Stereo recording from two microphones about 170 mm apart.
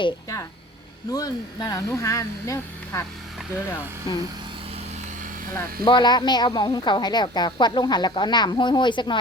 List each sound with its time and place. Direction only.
0.0 s a woman's voice: 20° left (ahead or behind)
4.1 s a woman's voice: 25° left (ahead or behind)
5.8 s a woman's voice: 25° left (ahead or behind)